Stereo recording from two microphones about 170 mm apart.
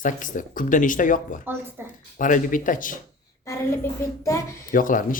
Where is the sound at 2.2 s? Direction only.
50° left (ahead or behind).